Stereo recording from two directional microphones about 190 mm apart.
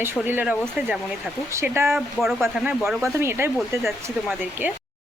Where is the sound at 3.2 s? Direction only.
15° right (ahead or behind).